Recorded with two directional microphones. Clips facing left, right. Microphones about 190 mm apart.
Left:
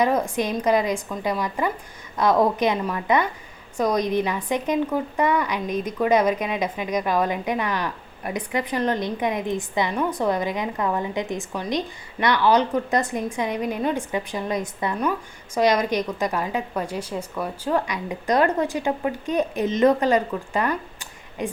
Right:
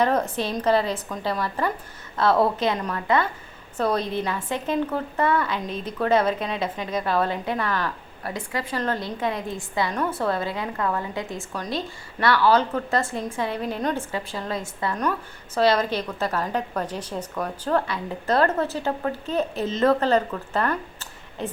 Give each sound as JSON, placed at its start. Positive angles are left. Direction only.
{"t": 0.0, "sound": "a woman's voice", "side_deg": 10}